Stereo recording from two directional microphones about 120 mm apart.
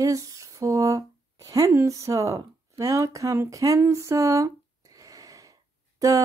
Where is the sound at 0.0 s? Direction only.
30° right (ahead or behind).